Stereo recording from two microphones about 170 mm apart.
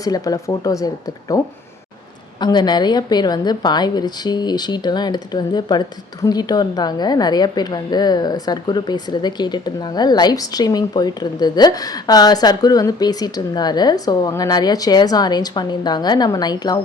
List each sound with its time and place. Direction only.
0.0 s a woman's voice: 20° left (ahead or behind)
2.4 s a woman's voice: 25° left (ahead or behind)